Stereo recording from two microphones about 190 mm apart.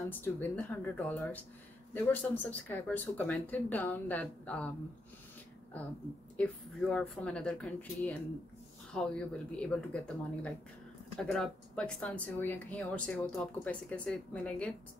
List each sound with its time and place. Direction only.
0.1 s speech: 10° left (ahead or behind)
6.3 s speech: 5° left (ahead or behind)